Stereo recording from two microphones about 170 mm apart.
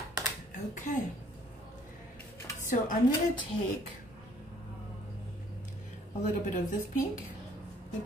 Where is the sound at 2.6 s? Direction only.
50° left (ahead or behind).